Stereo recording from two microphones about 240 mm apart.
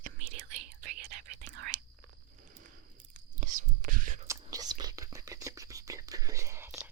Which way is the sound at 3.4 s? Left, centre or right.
Right.